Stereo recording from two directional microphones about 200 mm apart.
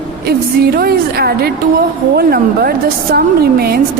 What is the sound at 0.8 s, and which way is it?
A woman's voice, 50° right (ahead or behind).